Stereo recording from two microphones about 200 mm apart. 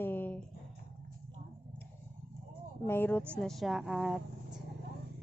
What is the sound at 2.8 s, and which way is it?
A woman's voice, 10° left (ahead or behind).